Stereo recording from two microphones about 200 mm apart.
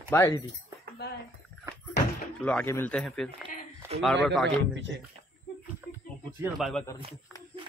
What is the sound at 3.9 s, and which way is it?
Speech, 30° right (ahead or behind).